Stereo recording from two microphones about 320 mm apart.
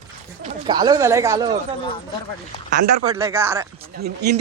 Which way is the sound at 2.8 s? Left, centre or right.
Right.